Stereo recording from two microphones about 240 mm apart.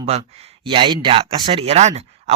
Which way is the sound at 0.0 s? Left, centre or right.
Right.